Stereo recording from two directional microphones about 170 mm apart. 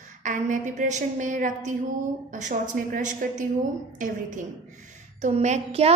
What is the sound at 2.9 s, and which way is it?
A woman's voice, 50° right (ahead or behind).